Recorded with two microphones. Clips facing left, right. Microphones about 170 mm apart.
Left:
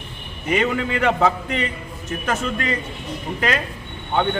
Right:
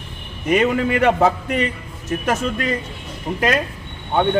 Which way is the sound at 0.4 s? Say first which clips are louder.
Right 4 dB; 50° right (ahead or behind).